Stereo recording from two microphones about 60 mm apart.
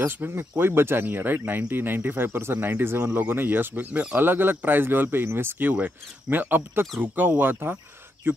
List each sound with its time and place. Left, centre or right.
0.2 s speech: right